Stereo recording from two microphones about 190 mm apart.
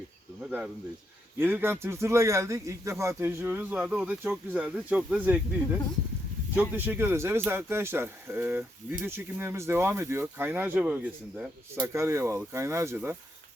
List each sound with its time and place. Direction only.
1.4 s speech: 10° right (ahead or behind)